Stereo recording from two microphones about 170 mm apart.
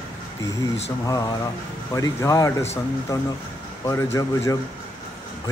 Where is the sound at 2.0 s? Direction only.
20° left (ahead or behind).